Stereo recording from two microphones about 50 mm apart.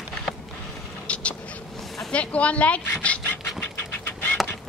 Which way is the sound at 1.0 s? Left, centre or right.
Left.